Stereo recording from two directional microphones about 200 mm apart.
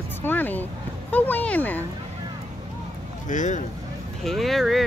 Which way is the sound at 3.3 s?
40° left (ahead or behind).